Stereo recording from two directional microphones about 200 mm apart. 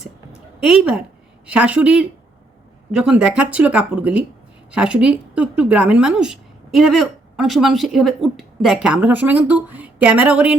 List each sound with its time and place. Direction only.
0.6 s a woman's voice: 5° right (ahead or behind)